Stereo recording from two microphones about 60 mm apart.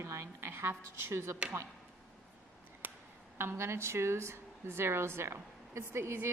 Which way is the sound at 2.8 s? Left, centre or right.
Right.